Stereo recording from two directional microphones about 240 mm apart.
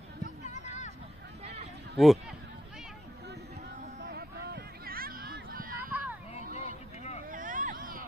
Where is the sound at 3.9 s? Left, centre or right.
Right.